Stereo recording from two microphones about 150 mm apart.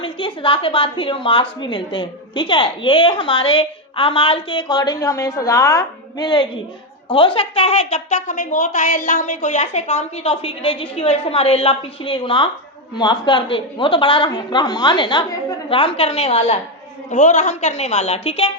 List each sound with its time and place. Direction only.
0.0 s a woman's voice: 35° left (ahead or behind)